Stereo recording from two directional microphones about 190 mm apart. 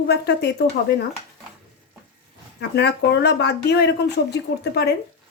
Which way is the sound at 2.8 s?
60° left (ahead or behind).